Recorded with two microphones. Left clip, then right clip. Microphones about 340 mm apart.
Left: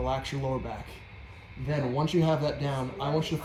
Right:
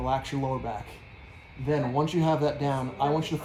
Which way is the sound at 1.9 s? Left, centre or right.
Centre.